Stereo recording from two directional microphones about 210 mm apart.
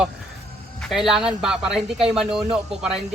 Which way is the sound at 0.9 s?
Centre (ahead or behind).